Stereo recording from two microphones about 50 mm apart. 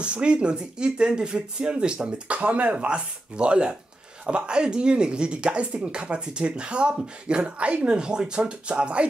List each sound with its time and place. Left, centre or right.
0.0 s speech: right